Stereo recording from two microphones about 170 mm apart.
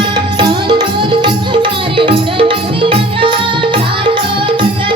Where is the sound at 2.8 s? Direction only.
30° right (ahead or behind).